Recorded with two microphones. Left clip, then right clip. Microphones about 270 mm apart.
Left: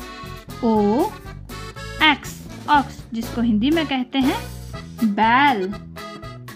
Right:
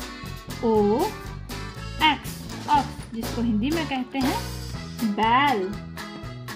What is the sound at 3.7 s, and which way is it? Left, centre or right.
Speech, left.